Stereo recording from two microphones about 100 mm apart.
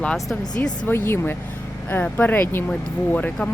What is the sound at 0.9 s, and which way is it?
Speech, 25° left (ahead or behind).